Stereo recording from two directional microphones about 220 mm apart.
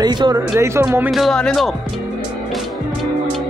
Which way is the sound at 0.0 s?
20° right (ahead or behind).